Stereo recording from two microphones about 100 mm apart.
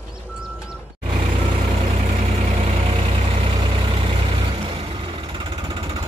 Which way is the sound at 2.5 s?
80° right.